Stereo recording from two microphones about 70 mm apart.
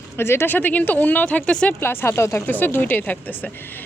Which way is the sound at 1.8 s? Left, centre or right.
Left.